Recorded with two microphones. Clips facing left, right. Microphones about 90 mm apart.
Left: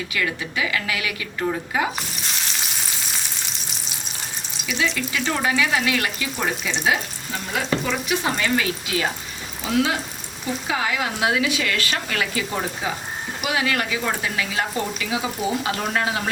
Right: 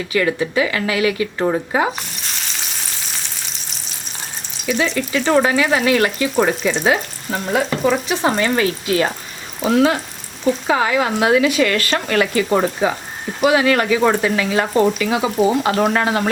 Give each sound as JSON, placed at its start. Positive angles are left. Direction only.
{"t": 0.1, "sound": "speech", "side_deg": -35}
{"t": 2.0, "sound": "sizzle", "side_deg": 0}
{"t": 4.9, "sound": "speech", "side_deg": -40}
{"t": 10.7, "sound": "speech", "side_deg": -40}
{"t": 12.5, "sound": "speech", "side_deg": -90}
{"t": 13.4, "sound": "speech", "side_deg": -40}
{"t": 13.9, "sound": "speech", "side_deg": -55}